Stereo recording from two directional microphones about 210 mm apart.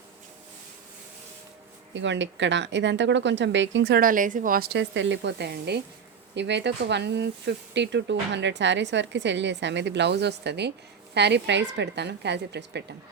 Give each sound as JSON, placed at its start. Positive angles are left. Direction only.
{"t": 1.9, "sound": "speech", "side_deg": -60}